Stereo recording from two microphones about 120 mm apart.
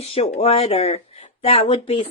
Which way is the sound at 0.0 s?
55° left (ahead or behind).